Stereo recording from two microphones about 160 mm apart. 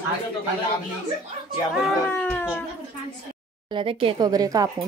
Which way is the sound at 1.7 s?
Centre (ahead or behind).